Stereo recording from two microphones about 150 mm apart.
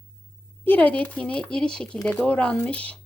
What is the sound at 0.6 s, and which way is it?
Speech, 10° left (ahead or behind).